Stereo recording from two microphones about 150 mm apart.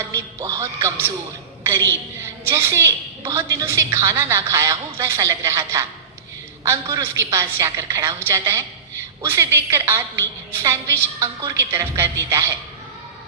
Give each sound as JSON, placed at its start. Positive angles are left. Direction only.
{"t": 0.1, "sound": "music", "side_deg": -20}
{"t": 2.5, "sound": "a woman's voice", "side_deg": -20}